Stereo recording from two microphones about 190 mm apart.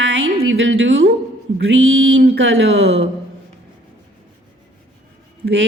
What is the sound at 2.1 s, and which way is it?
Speech, 65° right (ahead or behind).